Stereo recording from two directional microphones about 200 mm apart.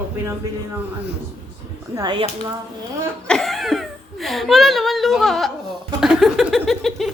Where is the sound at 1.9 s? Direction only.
25° right (ahead or behind).